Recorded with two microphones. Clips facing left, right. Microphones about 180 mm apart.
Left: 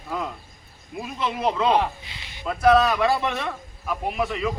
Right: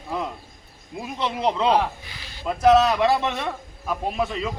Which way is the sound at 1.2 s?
20° right (ahead or behind).